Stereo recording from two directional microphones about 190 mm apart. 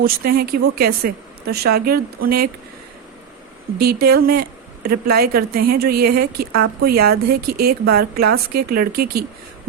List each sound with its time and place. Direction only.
0.0 s a woman's voice: 50° right (ahead or behind)
3.8 s speech: 55° right (ahead or behind)